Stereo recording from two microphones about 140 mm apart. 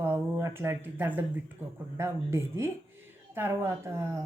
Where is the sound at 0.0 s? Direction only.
15° right (ahead or behind).